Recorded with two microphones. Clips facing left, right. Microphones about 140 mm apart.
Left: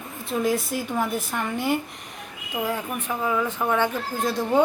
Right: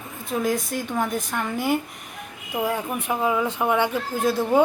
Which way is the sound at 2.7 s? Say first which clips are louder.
Right 2 dB; 15° right (ahead or behind).